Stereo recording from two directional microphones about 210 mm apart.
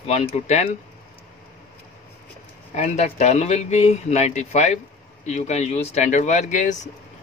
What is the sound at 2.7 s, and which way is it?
A man's voice, 30° left (ahead or behind).